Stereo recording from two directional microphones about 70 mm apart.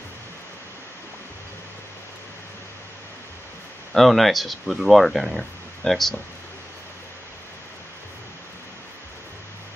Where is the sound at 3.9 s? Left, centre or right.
Centre.